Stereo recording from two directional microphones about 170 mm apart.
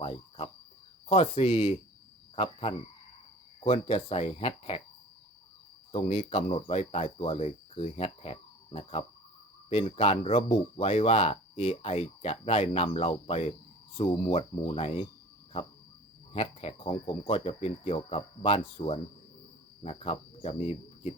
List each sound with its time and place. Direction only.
0.0 s speech: 35° left (ahead or behind)
5.9 s speech: 35° left (ahead or behind)
16.3 s speech: 35° left (ahead or behind)